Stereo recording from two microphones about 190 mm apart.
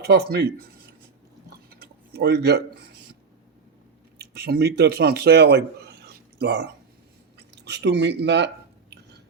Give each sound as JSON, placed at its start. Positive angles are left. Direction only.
{"t": 0.0, "sound": "speech", "side_deg": -60}
{"t": 1.5, "sound": "chewing", "side_deg": -55}
{"t": 4.2, "sound": "a man's voice", "side_deg": -55}
{"t": 8.9, "sound": "drip", "side_deg": -60}